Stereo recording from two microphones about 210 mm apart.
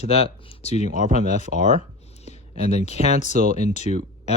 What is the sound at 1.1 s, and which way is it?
Speech, 30° left (ahead or behind).